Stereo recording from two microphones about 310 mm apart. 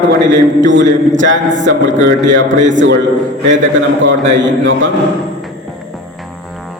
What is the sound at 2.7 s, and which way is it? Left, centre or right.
Mantra, right.